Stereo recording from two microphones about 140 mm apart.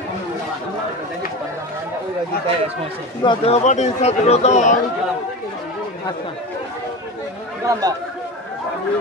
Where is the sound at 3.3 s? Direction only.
45° left (ahead or behind).